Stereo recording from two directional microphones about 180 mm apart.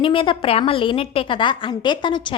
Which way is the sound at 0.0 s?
30° left (ahead or behind).